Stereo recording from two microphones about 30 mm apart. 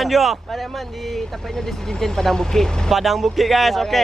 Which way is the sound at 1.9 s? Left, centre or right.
Centre.